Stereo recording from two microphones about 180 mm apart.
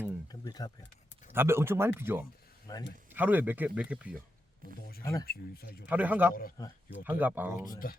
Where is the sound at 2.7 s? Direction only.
20° left (ahead or behind).